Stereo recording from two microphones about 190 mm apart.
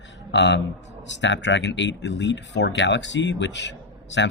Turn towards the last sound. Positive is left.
turn(degrees=70)  # may be behind; listen again after turning